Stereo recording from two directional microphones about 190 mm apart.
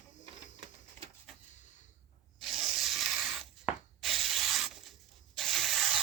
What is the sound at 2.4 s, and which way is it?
Spray, centre (ahead or behind).